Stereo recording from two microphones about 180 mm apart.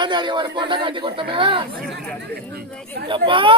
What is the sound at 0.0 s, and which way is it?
Speech, 25° right (ahead or behind).